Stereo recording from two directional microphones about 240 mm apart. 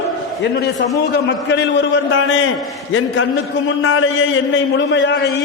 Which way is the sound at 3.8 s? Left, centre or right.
Left.